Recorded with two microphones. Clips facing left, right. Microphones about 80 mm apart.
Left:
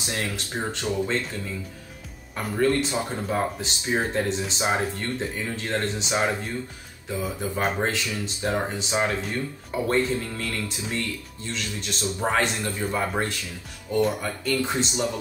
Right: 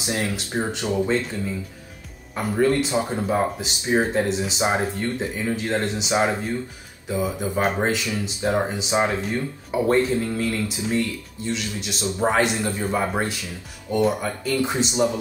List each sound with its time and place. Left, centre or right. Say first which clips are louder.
0.0 s speech: right 4 dB; centre
2.3 s speech: right 3 dB; centre
9.2 s speech: right 3 dB; centre